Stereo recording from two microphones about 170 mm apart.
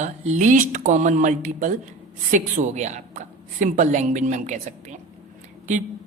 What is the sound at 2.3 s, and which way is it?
A woman's voice, 45° right (ahead or behind).